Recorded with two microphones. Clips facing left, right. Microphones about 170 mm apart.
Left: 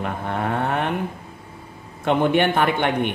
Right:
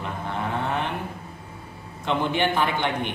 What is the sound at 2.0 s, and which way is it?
A man's voice, 60° left (ahead or behind).